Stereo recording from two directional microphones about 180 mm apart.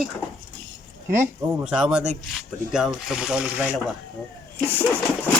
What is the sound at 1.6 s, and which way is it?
Speech, 5° right (ahead or behind).